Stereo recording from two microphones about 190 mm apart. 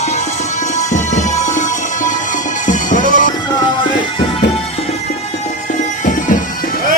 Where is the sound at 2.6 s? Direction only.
45° left (ahead or behind).